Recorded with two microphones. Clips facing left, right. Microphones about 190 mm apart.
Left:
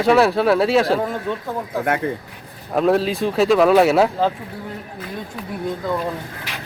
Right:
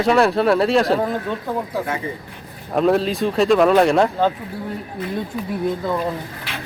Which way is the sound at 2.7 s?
Centre (ahead or behind).